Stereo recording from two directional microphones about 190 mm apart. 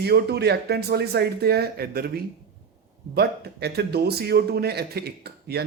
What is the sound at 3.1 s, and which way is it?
A man's voice, 60° right (ahead or behind).